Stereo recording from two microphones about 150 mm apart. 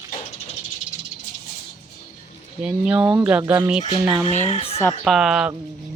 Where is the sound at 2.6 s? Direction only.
5° right (ahead or behind).